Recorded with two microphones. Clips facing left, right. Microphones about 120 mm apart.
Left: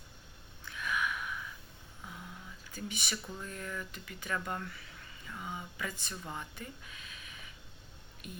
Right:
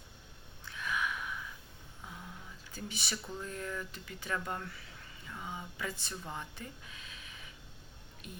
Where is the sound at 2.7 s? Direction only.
30° right (ahead or behind).